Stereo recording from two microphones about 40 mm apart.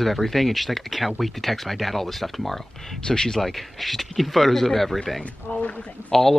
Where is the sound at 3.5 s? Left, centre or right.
Centre.